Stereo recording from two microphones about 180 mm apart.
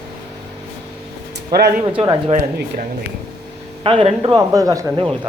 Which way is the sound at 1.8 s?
25° right (ahead or behind).